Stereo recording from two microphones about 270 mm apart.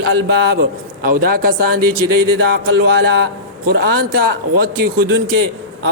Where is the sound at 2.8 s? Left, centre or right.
Right.